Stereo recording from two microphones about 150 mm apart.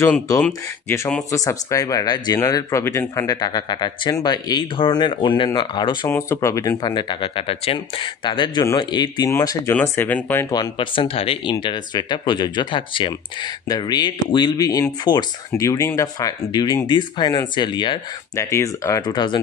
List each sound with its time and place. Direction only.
0.0 s speech: 15° left (ahead or behind); by 5.9 s 30° left (ahead or behind)
6.0 s speech: 15° left (ahead or behind)
9.8 s speech: 10° left (ahead or behind)
10.5 s speech: 30° left (ahead or behind)
18.4 s speech: 20° left (ahead or behind)